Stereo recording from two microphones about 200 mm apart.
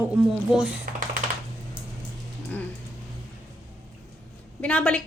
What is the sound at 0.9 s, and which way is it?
Typing, 45° right (ahead or behind).